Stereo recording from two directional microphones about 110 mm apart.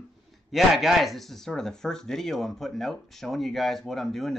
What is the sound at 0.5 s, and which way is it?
Speech, centre (ahead or behind).